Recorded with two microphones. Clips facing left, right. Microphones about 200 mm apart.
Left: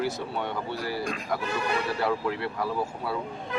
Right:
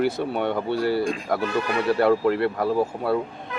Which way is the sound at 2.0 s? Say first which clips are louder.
Right 9 dB; 60° right (ahead or behind).